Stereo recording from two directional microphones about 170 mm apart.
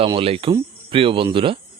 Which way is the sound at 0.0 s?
30° right (ahead or behind).